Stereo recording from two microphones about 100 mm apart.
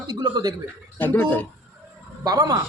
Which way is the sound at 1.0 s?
20° left (ahead or behind).